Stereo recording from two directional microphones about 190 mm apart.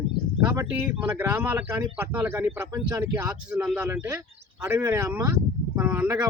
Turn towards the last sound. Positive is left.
turn(degrees=-20)  # may be behind; listen again after turning